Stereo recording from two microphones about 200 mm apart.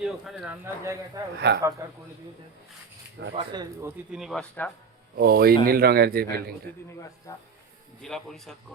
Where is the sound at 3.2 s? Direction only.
65° right (ahead or behind).